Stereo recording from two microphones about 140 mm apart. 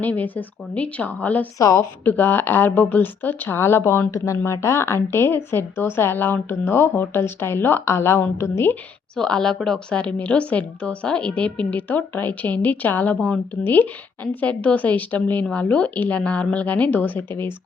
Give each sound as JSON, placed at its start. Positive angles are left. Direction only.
{"t": 0.0, "sound": "a woman's voice", "side_deg": 10}
{"t": 1.5, "sound": "a woman's voice", "side_deg": 25}
{"t": 9.1, "sound": "a woman's voice", "side_deg": 5}